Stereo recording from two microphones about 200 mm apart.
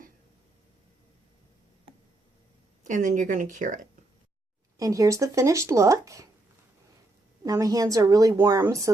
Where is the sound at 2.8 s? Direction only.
40° right (ahead or behind).